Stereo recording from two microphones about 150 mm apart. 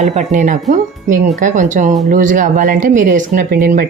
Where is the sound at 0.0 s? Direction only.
50° right (ahead or behind).